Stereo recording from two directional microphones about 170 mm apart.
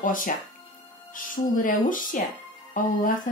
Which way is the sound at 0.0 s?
55° left (ahead or behind).